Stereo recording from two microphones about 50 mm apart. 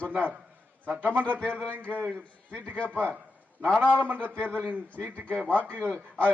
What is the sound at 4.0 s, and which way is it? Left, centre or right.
Speech, right.